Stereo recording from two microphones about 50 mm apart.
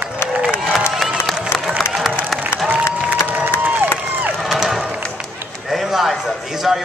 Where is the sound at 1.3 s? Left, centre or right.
Right.